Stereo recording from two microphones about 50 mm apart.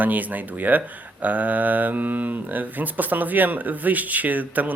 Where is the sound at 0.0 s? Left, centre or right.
Right.